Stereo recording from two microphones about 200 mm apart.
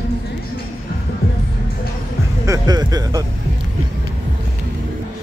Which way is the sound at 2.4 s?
20° right (ahead or behind).